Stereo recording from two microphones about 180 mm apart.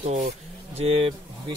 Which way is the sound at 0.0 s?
35° right (ahead or behind).